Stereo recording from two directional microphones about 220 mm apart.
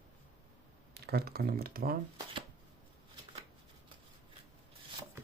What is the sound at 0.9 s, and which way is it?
Speech, 45° right (ahead or behind).